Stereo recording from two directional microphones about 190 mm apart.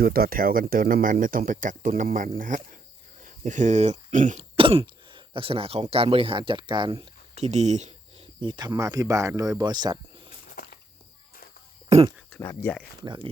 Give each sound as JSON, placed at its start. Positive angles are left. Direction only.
{"t": 0.0, "sound": "speech", "side_deg": -50}
{"t": 4.5, "sound": "speech", "side_deg": -30}
{"t": 10.5, "sound": "a sound", "side_deg": 50}
{"t": 11.9, "sound": "speech", "side_deg": -30}
{"t": 12.4, "sound": "speech", "side_deg": 15}